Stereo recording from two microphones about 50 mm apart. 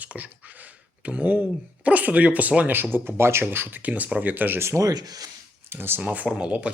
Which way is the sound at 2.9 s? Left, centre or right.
Right.